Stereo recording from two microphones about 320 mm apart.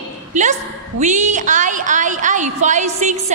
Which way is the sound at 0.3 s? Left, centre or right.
Right.